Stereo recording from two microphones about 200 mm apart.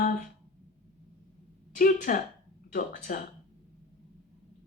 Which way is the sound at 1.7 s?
45° left (ahead or behind).